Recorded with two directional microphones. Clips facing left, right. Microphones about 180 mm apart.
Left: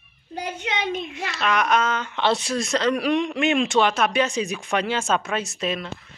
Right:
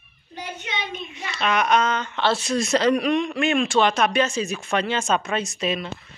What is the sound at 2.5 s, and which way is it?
Speech, 5° right (ahead or behind).